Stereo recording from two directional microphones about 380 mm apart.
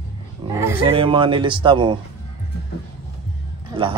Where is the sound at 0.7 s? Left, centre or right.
Centre.